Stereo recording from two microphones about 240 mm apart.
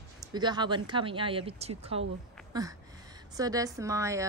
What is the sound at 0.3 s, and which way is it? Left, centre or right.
A woman's voice, centre.